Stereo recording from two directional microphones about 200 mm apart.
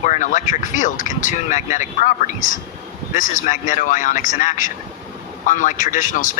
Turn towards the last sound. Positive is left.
turn(degrees=40)  # may be behind; listen again after turning